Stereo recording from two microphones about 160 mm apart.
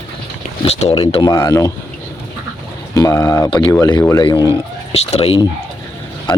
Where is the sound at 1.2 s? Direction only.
20° left (ahead or behind).